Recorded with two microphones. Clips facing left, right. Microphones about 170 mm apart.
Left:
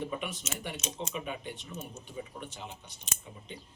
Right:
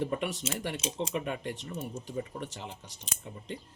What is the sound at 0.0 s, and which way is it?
Speech, 75° right (ahead or behind).